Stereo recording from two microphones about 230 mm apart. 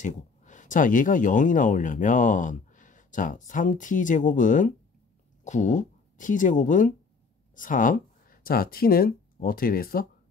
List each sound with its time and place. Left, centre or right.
0.0 s speech: left